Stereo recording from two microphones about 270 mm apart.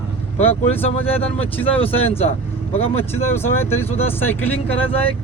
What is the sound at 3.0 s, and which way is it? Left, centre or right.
Speech, centre.